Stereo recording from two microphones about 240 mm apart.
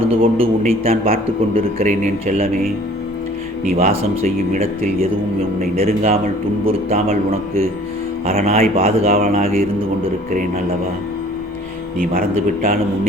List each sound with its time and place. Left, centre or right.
0.1 s a man's voice: right
3.8 s a man's voice: right
8.3 s a man's voice: right